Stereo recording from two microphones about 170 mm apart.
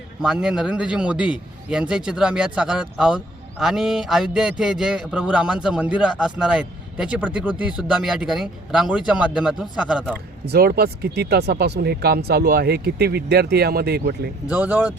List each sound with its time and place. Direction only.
0.2 s a man's voice: 5° right (ahead or behind)
10.4 s speech: 65° right (ahead or behind)
14.5 s speech: 10° right (ahead or behind)